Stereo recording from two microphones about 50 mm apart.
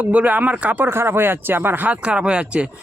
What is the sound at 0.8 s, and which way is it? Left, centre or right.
Speech, right.